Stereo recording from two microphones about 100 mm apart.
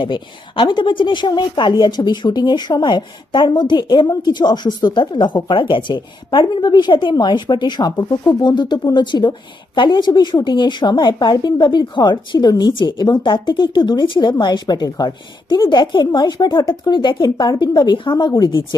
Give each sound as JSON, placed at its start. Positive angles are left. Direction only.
{"t": 0.0, "sound": "a woman's voice", "side_deg": 55}